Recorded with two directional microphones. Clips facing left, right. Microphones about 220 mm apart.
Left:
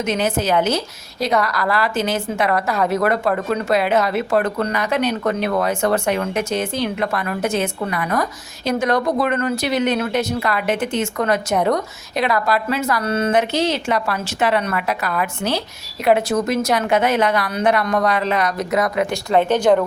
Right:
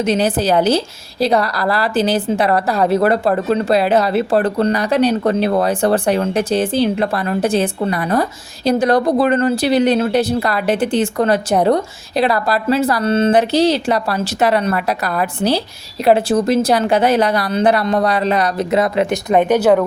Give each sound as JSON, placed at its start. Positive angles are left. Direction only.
{"t": 0.0, "sound": "a woman's voice", "side_deg": -35}
{"t": 19.5, "sound": "speech", "side_deg": -5}